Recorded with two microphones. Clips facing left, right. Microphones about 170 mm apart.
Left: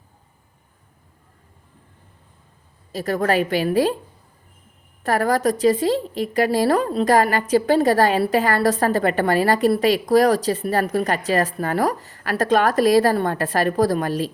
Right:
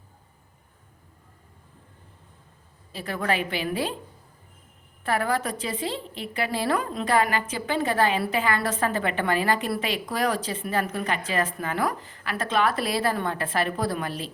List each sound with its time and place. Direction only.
2.9 s a woman's voice: 40° left (ahead or behind)
5.0 s a woman's voice: 40° left (ahead or behind)